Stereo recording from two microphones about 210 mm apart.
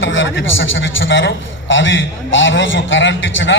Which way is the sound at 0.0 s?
60° left (ahead or behind).